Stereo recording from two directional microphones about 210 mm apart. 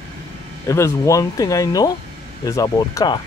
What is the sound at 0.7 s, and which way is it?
Speech, 15° left (ahead or behind).